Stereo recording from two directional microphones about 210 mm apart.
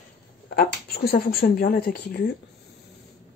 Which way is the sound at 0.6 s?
45° left (ahead or behind).